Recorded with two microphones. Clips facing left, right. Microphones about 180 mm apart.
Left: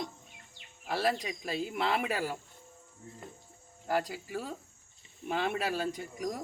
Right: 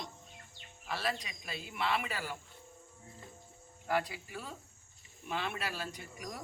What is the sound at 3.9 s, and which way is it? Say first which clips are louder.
Speech: left 3 dB; 40° left (ahead or behind).